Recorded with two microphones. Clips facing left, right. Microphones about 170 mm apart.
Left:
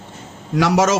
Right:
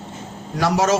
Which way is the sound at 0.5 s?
80° left.